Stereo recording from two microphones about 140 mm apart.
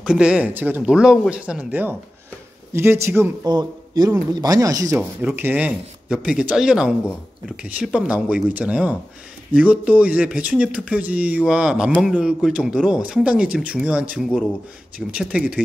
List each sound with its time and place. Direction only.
0.0 s speech: 5° right (ahead or behind)
3.4 s a man's voice: 30° right (ahead or behind)
5.2 s speech: 15° right (ahead or behind)